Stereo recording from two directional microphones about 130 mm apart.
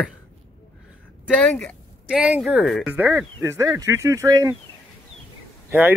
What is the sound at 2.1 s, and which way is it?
Speech, 10° right (ahead or behind).